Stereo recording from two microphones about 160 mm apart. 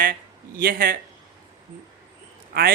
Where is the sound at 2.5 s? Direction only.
75° right (ahead or behind).